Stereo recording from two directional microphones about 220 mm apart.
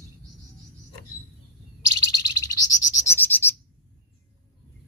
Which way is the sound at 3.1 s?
10° left (ahead or behind).